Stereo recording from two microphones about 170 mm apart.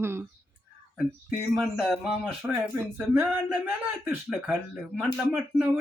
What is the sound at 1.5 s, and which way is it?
Speech, centre (ahead or behind).